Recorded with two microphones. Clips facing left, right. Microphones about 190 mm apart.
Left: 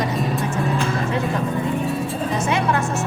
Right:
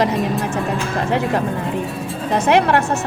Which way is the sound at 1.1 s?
70° right (ahead or behind).